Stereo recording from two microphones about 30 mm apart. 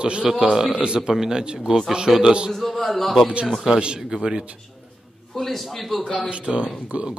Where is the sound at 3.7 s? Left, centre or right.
Centre.